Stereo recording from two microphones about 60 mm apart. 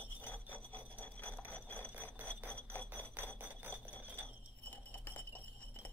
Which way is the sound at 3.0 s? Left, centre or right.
Left.